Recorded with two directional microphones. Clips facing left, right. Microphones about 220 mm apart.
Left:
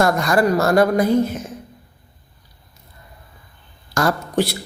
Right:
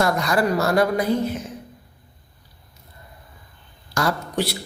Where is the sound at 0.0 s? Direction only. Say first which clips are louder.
Left 4 dB; 45° left (ahead or behind).